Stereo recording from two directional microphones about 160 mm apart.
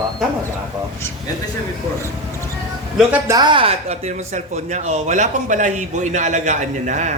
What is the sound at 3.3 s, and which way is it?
Speech, 25° right (ahead or behind).